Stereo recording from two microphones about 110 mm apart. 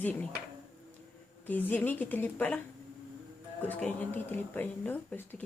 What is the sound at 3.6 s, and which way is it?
Speech, 15° left (ahead or behind).